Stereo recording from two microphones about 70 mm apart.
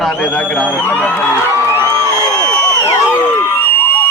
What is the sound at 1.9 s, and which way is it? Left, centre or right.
Crowd, left.